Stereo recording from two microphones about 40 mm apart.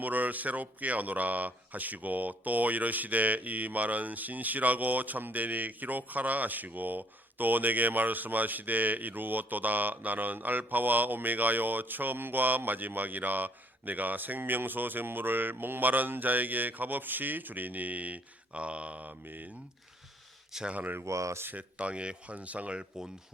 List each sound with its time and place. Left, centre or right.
0.0 s speech: right
19.2 s speech: right
20.5 s speech: centre
21.0 s speech: right
21.5 s speech: right